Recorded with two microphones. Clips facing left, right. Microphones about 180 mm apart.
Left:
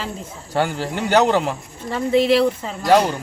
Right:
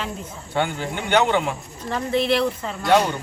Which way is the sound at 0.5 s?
40° left (ahead or behind).